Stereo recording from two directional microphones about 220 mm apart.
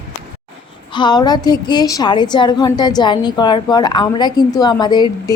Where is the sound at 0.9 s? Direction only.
20° left (ahead or behind).